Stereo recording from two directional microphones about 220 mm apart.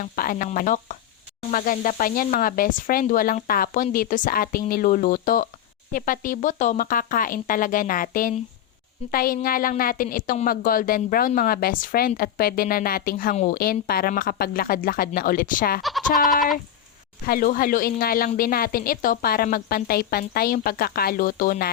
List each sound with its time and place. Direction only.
0.0 s a woman's voice: 40° left (ahead or behind)
15.8 s bleat: centre (ahead or behind)
17.2 s a woman's voice: 40° left (ahead or behind)